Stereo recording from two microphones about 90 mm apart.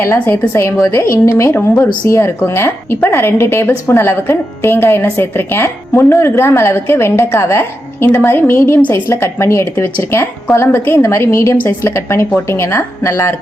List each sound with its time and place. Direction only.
0.0 s a woman's voice: 25° left (ahead or behind)